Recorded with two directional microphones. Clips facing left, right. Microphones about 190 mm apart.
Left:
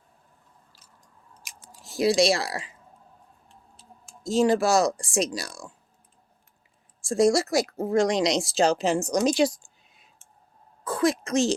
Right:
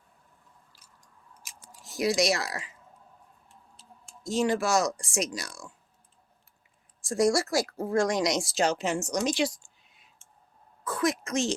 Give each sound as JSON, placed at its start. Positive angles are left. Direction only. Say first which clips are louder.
{"t": 1.8, "sound": "speech", "louder": "left 5 dB", "side_deg": 30}
{"t": 4.3, "sound": "speech", "louder": "left 5 dB", "side_deg": 35}
{"t": 7.0, "sound": "speech", "louder": "left 4 dB", "side_deg": 25}
{"t": 10.8, "sound": "a woman's voice", "louder": "left 4 dB", "side_deg": 30}